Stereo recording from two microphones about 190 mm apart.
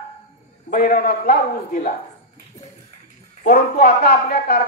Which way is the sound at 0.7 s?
50° left (ahead or behind).